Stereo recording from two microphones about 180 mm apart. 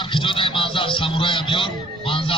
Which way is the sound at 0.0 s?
30° left (ahead or behind).